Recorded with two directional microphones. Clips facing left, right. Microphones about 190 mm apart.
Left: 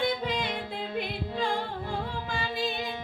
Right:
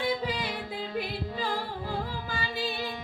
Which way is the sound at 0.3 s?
5° right (ahead or behind).